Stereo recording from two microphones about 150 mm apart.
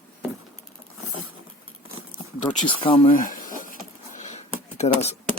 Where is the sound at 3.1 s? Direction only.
65° left (ahead or behind).